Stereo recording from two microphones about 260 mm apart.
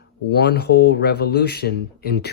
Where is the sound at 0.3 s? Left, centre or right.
Left.